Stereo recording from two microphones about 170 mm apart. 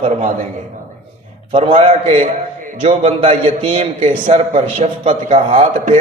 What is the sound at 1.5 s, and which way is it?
A man's voice, 35° right (ahead or behind).